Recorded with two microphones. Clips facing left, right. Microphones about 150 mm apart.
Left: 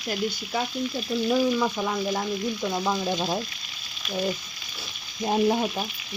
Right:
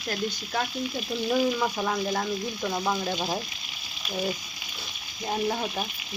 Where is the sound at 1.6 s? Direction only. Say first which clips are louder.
Left 1 dB; 5° right (ahead or behind).